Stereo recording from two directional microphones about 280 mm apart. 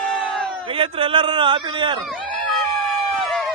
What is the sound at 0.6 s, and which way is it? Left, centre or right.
A man's voice, centre.